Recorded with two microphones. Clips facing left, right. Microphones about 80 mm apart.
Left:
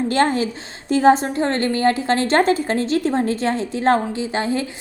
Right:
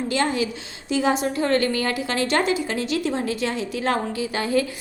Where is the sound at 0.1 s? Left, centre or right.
Left.